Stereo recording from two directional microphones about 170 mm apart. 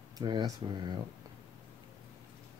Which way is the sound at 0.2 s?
25° right (ahead or behind).